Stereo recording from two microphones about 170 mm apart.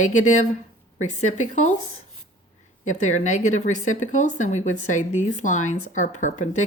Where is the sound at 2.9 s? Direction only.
45° left (ahead or behind).